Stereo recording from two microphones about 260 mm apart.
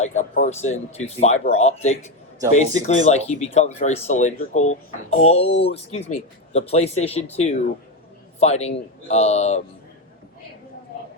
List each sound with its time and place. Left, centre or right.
0.0 s speech: left
8.4 s speech: left